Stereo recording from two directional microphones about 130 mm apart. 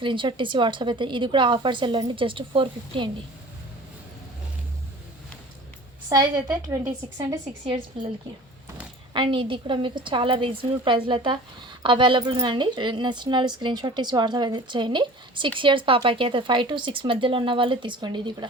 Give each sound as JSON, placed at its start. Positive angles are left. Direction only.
{"t": 0.0, "sound": "a woman's voice", "side_deg": -40}
{"t": 6.1, "sound": "a woman's voice", "side_deg": -30}
{"t": 9.1, "sound": "a woman's voice", "side_deg": -40}